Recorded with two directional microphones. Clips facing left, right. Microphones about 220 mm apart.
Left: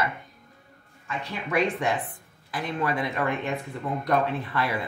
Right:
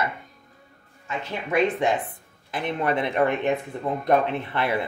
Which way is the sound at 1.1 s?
25° right (ahead or behind).